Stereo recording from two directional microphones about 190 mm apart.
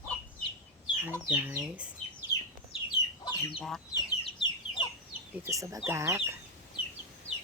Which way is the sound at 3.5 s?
Centre (ahead or behind).